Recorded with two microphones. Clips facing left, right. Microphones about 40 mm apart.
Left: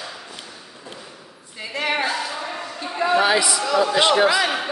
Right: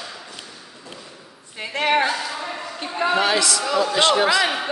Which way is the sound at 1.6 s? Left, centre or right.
Right.